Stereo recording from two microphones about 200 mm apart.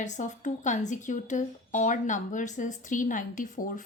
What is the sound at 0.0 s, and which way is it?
A woman's voice, 35° left (ahead or behind).